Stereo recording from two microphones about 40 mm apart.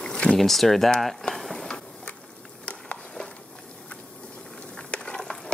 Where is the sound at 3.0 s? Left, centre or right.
Centre.